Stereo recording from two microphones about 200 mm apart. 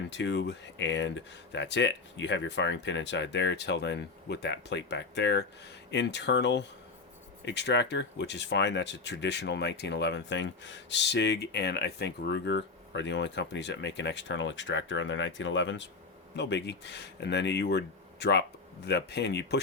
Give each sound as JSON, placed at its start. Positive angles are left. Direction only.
{"t": 0.1, "sound": "speech", "side_deg": 65}